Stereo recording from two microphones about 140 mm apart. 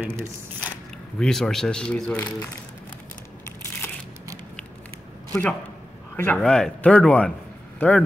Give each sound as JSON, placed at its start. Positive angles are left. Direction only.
{"t": 0.0, "sound": "speech", "side_deg": -15}
{"t": 1.2, "sound": "speech", "side_deg": 5}
{"t": 5.3, "sound": "a man's voice", "side_deg": 10}